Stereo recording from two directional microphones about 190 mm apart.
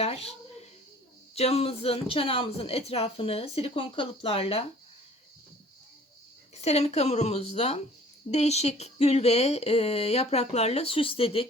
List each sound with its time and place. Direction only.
0.0 s speech: 30° left (ahead or behind)
1.4 s speech: 30° left (ahead or behind)
6.6 s speech: 35° left (ahead or behind)